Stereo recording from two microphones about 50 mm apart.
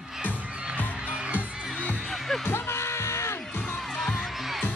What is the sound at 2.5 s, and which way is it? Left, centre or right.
Music, left.